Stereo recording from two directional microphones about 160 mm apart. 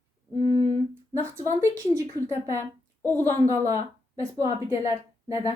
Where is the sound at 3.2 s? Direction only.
20° right (ahead or behind).